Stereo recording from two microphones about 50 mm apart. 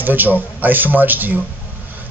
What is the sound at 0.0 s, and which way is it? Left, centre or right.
Speech, right.